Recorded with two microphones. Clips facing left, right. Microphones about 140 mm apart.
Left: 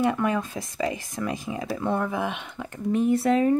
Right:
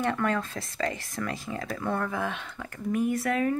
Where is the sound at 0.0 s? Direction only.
15° left (ahead or behind).